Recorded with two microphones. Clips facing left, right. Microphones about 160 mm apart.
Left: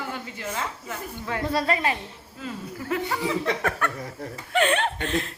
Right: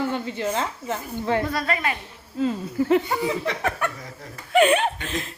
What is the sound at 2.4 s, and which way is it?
Speech, 25° right (ahead or behind).